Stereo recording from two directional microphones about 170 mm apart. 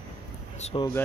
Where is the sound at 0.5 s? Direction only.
40° left (ahead or behind).